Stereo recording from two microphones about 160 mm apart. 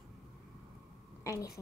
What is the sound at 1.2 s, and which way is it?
Speech, 20° left (ahead or behind).